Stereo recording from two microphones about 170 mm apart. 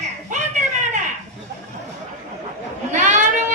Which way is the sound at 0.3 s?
45° right (ahead or behind).